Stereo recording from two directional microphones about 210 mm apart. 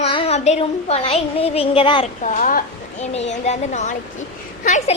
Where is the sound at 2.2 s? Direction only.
40° left (ahead or behind).